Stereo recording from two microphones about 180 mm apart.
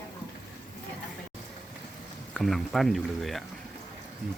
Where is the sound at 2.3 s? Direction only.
Centre (ahead or behind).